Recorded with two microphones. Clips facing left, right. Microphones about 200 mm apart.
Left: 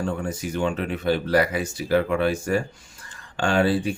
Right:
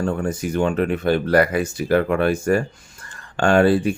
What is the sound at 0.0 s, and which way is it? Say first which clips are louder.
Speech: right 5 dB; 50° right (ahead or behind).